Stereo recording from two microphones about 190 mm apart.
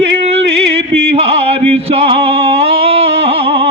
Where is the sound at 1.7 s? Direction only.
30° right (ahead or behind).